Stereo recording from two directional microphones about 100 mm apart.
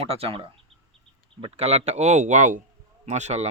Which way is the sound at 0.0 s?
75° right (ahead or behind).